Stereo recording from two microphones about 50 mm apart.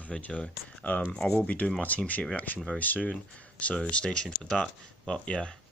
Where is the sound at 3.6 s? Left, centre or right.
Left.